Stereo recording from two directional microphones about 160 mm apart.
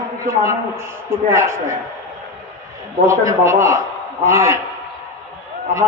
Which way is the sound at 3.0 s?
20° right (ahead or behind).